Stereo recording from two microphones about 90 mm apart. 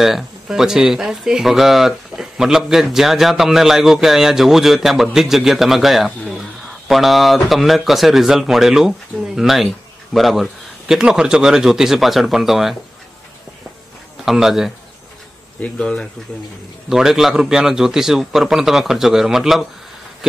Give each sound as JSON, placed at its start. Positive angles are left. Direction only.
{"t": 0.0, "sound": "a man's voice", "side_deg": -5}
{"t": 14.2, "sound": "a man's voice", "side_deg": -5}
{"t": 15.6, "sound": "speech", "side_deg": 10}
{"t": 16.9, "sound": "a man's voice", "side_deg": -5}